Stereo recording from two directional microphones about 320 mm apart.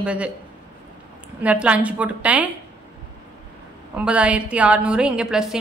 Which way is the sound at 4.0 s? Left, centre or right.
Centre.